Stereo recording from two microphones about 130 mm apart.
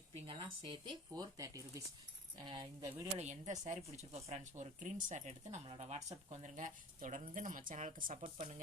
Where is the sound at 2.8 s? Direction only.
25° right (ahead or behind).